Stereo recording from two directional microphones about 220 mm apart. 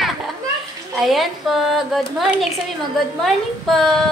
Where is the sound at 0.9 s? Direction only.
Centre (ahead or behind).